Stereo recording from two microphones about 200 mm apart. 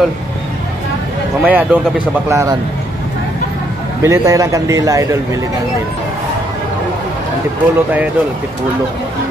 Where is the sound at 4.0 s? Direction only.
15° right (ahead or behind).